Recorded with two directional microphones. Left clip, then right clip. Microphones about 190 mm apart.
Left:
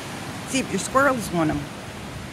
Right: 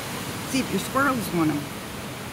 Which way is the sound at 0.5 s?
45° left (ahead or behind).